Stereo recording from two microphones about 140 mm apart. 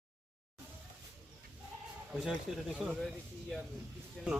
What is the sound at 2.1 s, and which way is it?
Speech, 5° right (ahead or behind).